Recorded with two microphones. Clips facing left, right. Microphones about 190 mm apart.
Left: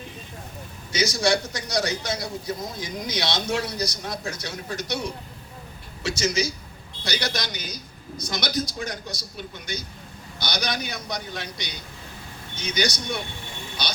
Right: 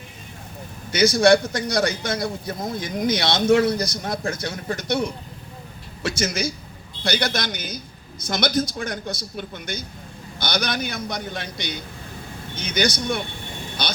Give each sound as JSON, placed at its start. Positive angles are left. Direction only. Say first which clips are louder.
{"t": 0.9, "sound": "a man's voice", "louder": "right 7 dB", "side_deg": -55}